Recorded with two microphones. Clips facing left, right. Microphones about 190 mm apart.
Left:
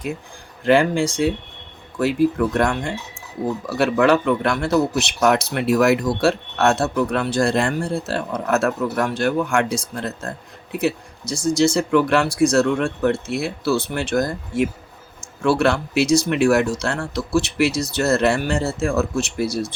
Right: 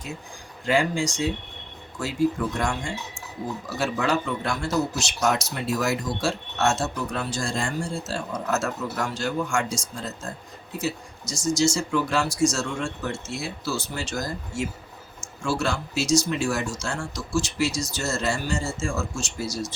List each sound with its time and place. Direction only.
0.6 s speech: 60° left (ahead or behind)